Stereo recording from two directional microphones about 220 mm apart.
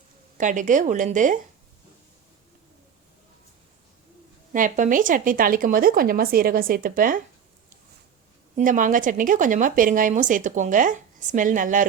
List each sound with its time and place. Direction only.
0.3 s a woman's voice: 35° right (ahead or behind)
4.5 s a woman's voice: 35° right (ahead or behind)
8.5 s a woman's voice: 35° right (ahead or behind)